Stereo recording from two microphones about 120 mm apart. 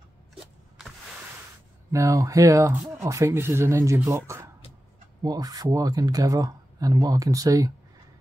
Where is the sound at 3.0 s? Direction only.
25° right (ahead or behind).